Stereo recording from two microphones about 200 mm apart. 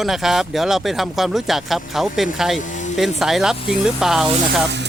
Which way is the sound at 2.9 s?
Centre (ahead or behind).